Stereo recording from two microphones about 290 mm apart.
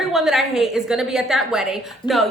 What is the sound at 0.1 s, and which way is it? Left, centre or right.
A woman's voice, centre.